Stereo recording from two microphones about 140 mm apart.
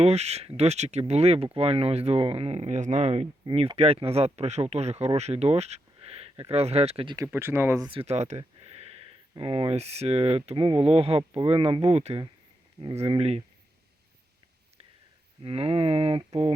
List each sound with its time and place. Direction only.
0.0 s speech: 50° right (ahead or behind)
7.3 s speech: 15° right (ahead or behind)
7.9 s speech: 45° right (ahead or behind)
15.4 s speech: 40° right (ahead or behind)